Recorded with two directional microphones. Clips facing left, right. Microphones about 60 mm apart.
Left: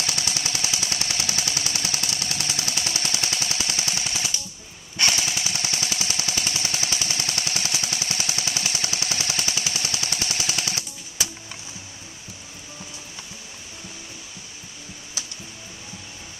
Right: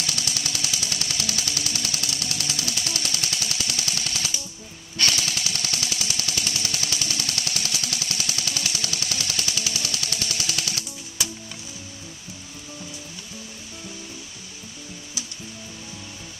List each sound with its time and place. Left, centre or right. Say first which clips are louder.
0.0 s jackhammer: left 1 dB; left